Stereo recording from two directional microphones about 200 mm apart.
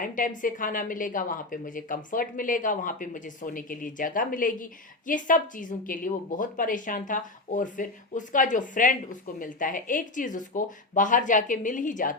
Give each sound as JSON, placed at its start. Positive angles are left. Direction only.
{"t": 0.0, "sound": "a woman's voice", "side_deg": 40}